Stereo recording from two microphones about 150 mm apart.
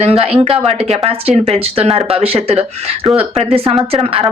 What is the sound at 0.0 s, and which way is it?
Speech, 40° right (ahead or behind).